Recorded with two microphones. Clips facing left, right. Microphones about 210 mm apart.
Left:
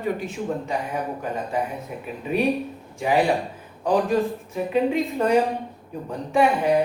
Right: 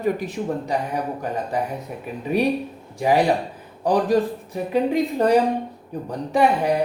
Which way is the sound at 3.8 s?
35° right (ahead or behind).